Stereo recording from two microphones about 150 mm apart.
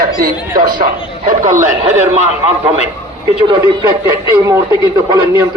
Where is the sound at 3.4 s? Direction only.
30° right (ahead or behind).